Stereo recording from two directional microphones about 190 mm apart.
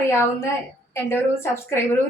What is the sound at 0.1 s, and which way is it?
A woman's voice, 10° left (ahead or behind).